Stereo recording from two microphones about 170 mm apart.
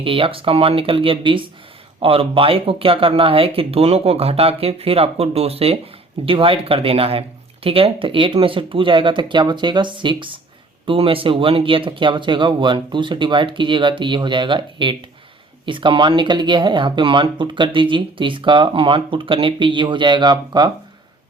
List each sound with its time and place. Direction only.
0.0 s speech: 30° right (ahead or behind)